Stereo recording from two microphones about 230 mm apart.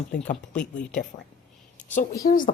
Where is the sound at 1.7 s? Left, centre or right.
Left.